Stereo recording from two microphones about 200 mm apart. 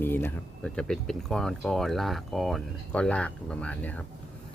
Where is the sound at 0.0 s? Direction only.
10° left (ahead or behind).